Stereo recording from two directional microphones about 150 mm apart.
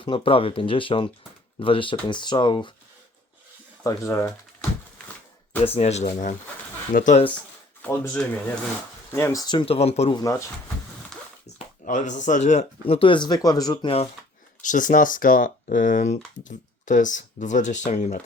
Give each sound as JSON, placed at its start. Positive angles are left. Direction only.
{"t": 0.0, "sound": "speech", "side_deg": 35}
{"t": 3.8, "sound": "speech", "side_deg": 20}
{"t": 5.6, "sound": "speech", "side_deg": 45}
{"t": 7.8, "sound": "speech", "side_deg": 10}
{"t": 10.2, "sound": "speech", "side_deg": 20}
{"t": 11.1, "sound": "a sound", "side_deg": 5}
{"t": 11.4, "sound": "speech", "side_deg": 55}
{"t": 12.9, "sound": "speech", "side_deg": 35}
{"t": 14.6, "sound": "speech", "side_deg": 60}